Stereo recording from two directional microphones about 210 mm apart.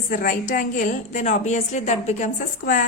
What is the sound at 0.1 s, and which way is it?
A woman's voice, 40° left (ahead or behind).